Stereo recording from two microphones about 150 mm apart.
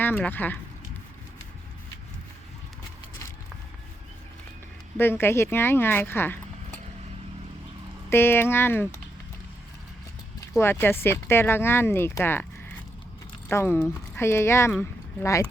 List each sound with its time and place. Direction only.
0.0 s speech: 10° left (ahead or behind)
4.9 s speech: 15° left (ahead or behind)
8.1 s speech: 15° left (ahead or behind)
10.6 s speech: 15° left (ahead or behind)